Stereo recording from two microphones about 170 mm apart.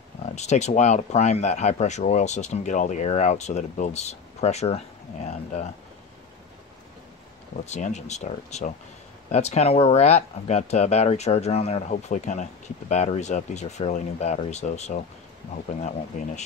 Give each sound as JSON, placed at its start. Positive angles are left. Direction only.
{"t": 0.4, "sound": "speech", "side_deg": 40}
{"t": 7.6, "sound": "speech", "side_deg": 40}